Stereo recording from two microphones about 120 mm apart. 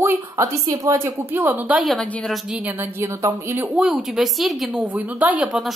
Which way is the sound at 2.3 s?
5° right (ahead or behind).